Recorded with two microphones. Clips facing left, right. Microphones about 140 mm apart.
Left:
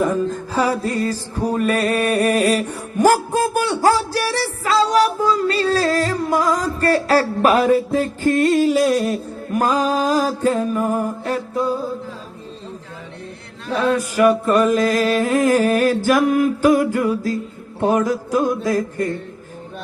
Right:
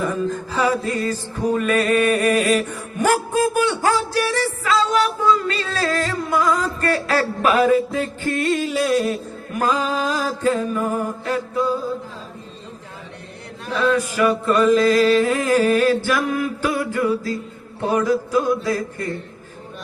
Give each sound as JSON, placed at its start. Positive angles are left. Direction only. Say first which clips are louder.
{"t": 0.0, "sound": "music", "louder": "left 3 dB", "side_deg": 40}
{"t": 13.8, "sound": "music", "louder": "left 2 dB", "side_deg": 45}